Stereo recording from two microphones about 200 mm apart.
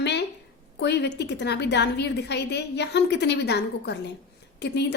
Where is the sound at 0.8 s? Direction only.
60° left (ahead or behind).